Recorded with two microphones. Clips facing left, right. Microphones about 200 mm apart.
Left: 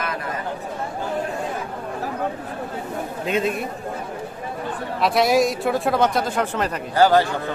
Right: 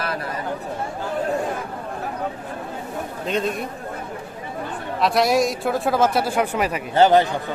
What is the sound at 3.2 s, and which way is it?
Speech, 5° left (ahead or behind).